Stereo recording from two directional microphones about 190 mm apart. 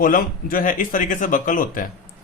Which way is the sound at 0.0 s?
50° left (ahead or behind).